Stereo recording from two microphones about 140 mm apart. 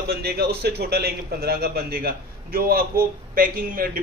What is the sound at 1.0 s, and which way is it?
A man's voice, 90° right.